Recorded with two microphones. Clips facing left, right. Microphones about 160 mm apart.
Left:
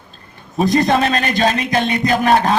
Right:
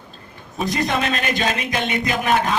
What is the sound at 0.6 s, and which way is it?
A man's voice, 40° left (ahead or behind).